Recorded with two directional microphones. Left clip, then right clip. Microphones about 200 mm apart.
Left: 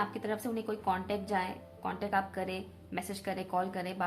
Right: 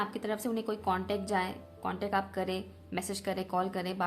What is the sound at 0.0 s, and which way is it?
A woman's voice, 30° right (ahead or behind).